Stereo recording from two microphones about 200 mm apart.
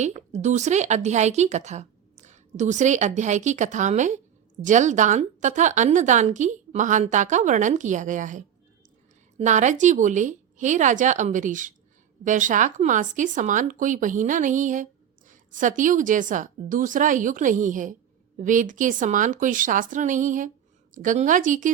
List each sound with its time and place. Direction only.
0.0 s a woman's voice: 35° right (ahead or behind)